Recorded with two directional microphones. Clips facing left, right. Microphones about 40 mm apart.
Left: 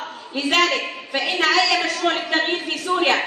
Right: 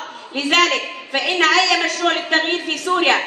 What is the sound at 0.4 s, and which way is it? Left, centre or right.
A man's voice, right.